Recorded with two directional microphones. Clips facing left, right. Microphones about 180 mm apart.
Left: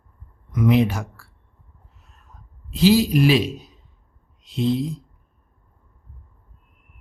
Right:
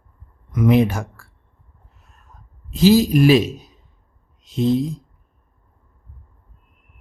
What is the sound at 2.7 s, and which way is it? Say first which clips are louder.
Speech: right 3 dB; 45° right (ahead or behind).